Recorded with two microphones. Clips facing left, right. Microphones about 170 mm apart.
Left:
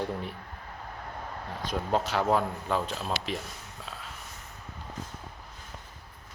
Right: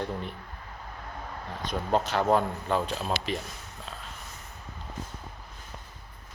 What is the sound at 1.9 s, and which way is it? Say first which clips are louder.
Speech: right 2 dB; 5° left (ahead or behind).